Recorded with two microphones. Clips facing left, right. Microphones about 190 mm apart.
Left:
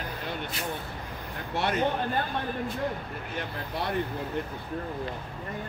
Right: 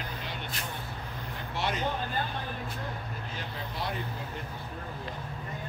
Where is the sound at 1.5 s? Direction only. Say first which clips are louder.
Left 5 dB; 55° left (ahead or behind).